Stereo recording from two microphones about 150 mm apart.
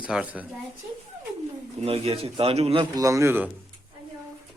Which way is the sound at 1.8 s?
40° right (ahead or behind).